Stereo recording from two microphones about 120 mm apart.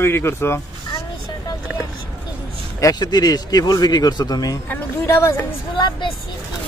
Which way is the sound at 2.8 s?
30° left (ahead or behind).